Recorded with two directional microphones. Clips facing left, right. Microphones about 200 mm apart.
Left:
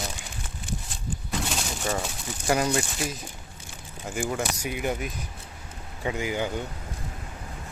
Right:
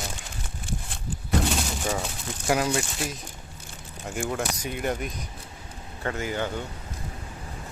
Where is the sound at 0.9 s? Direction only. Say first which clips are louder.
Right 8 dB; 60° right (ahead or behind).